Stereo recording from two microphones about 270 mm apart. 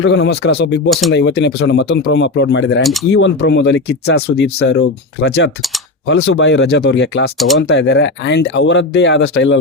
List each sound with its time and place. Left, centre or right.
0.0 s speech: left
2.8 s speech: centre
3.1 s speech: left
7.3 s speech: centre
7.7 s speech: left